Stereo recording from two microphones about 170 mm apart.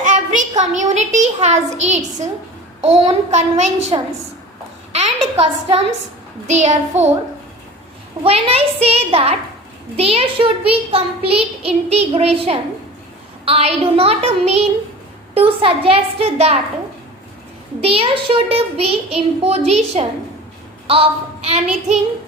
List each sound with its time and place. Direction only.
0.0 s child singing: 45° right (ahead or behind)
0.9 s a child's voice: 45° right (ahead or behind)
2.8 s child singing: 40° right (ahead or behind)
4.9 s a woman's voice: 40° right (ahead or behind)
6.5 s child singing: 40° right (ahead or behind)
8.2 s child singing: 35° right (ahead or behind)
17.7 s child singing: 35° right (ahead or behind)